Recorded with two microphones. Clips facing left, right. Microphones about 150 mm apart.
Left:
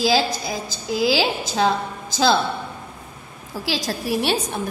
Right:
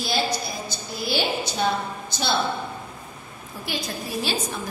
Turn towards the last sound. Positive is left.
turn(degrees=65)  # may be behind; listen again after turning